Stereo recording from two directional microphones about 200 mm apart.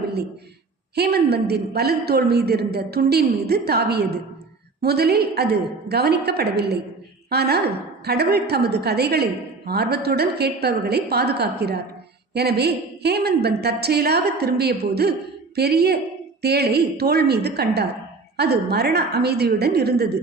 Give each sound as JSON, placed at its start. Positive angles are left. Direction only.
{"t": 0.9, "sound": "a woman's voice", "side_deg": -50}